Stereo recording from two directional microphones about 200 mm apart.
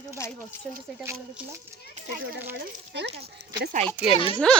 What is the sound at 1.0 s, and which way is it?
Speech, 15° right (ahead or behind).